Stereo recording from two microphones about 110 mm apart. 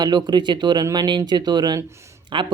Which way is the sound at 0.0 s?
40° right (ahead or behind).